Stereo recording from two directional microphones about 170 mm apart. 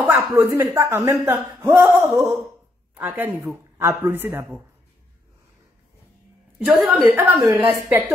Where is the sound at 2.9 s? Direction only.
10° right (ahead or behind).